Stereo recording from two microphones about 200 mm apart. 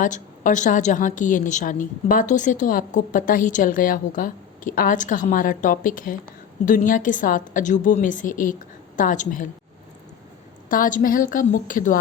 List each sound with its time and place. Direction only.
0.0 s a woman's voice: 40° left (ahead or behind)
10.7 s a woman's voice: 40° left (ahead or behind)